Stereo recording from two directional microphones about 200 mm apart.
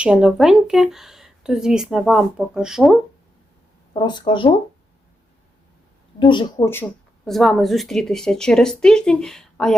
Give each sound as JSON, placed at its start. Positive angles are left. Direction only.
{"t": 0.0, "sound": "speech", "side_deg": -5}
{"t": 3.9, "sound": "speech", "side_deg": 20}
{"t": 6.1, "sound": "speech", "side_deg": 25}
{"t": 7.3, "sound": "speech", "side_deg": 0}